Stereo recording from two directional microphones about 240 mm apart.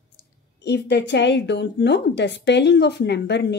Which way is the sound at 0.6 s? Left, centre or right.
Left.